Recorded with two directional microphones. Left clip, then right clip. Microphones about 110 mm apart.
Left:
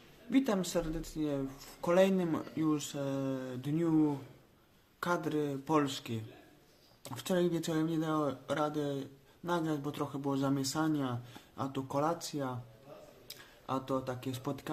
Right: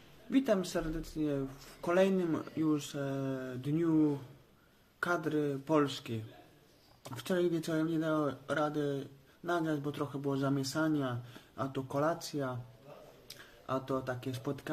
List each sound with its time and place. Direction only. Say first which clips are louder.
0.3 s speech: right 1 dB; 15° left (ahead or behind)
4.9 s speech: right 1 dB; 20° left (ahead or behind)